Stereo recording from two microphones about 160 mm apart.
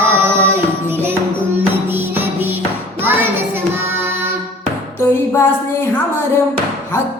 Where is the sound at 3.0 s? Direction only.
15° right (ahead or behind).